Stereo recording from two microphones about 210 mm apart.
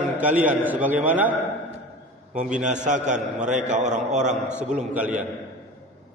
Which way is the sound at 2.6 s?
35° right (ahead or behind).